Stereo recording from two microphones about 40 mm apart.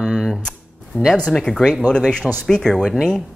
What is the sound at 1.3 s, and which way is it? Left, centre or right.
A man's voice, centre.